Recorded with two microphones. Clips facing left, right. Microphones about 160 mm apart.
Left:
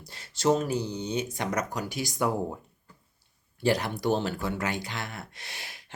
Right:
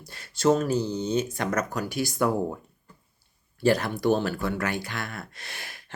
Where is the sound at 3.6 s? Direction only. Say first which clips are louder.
Right 3 dB; 20° left (ahead or behind).